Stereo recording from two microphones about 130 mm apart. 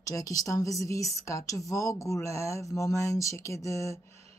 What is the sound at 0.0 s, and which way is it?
Speech, 25° left (ahead or behind).